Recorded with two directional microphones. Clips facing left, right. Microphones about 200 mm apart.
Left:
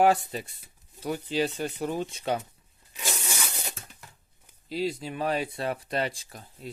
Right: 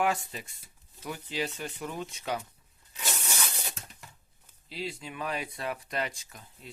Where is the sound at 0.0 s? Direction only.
35° left (ahead or behind).